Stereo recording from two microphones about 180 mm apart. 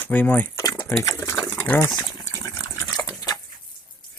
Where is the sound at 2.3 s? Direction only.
15° left (ahead or behind).